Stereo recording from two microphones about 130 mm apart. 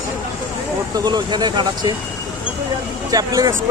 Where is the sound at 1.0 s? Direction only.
30° right (ahead or behind).